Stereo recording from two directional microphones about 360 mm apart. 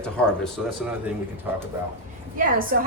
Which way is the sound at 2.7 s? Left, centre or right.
Right.